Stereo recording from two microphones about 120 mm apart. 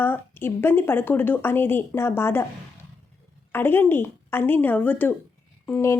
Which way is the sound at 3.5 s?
20° left (ahead or behind).